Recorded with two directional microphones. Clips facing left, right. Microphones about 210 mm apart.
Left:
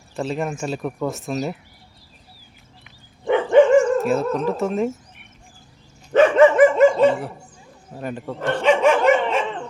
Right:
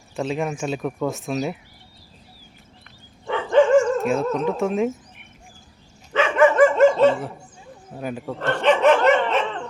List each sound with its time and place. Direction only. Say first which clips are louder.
0.2 s speech: even; centre (ahead or behind)
3.2 s dog: left 3 dB; 15° left (ahead or behind)
4.0 s speech: left 1 dB; centre (ahead or behind)
6.1 s dog: left 7 dB; 40° left (ahead or behind)
6.4 s dog: even; 20° left (ahead or behind)
6.9 s dog: even; 5° left (ahead or behind)
7.9 s speech: even; centre (ahead or behind)
8.6 s dog: even; 10° left (ahead or behind)